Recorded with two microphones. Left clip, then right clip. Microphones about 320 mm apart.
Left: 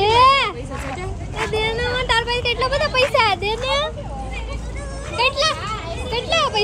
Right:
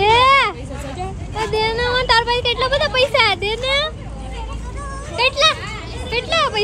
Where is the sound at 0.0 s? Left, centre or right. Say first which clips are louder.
Right 1 dB; centre.